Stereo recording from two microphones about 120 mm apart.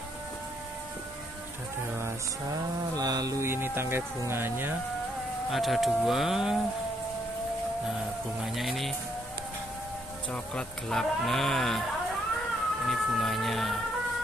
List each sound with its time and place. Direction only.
3.0 s speech: 30° right (ahead or behind)
5.5 s speech: centre (ahead or behind)
8.4 s speech: centre (ahead or behind)
10.3 s speech: 5° left (ahead or behind)
12.8 s speech: centre (ahead or behind)